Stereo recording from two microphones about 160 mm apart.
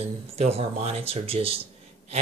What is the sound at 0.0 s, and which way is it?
Speech, 40° right (ahead or behind).